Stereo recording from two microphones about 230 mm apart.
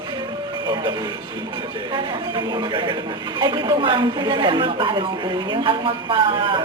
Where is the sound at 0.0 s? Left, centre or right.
Centre.